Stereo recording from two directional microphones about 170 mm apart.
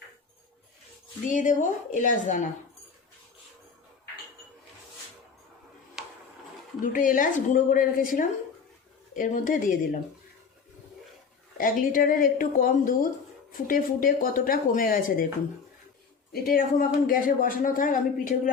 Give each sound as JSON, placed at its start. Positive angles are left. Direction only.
{"t": 1.3, "sound": "speech", "side_deg": 50}
{"t": 6.0, "sound": "a sound", "side_deg": 0}
{"t": 6.8, "sound": "speech", "side_deg": 50}
{"t": 11.5, "sound": "speech", "side_deg": 55}
{"t": 16.3, "sound": "speech", "side_deg": 55}